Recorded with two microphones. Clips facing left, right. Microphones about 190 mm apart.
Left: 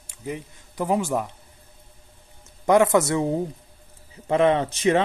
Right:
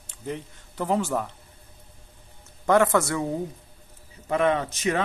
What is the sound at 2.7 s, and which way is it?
Speech, 15° left (ahead or behind).